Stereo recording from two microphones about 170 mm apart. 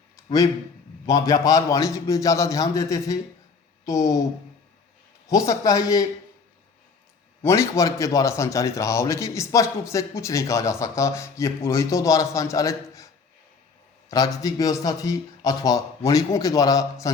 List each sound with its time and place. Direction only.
1.0 s speech: 20° left (ahead or behind)
5.3 s speech: 20° left (ahead or behind)
7.4 s a man's voice: 20° left (ahead or behind)
14.1 s speech: 20° left (ahead or behind)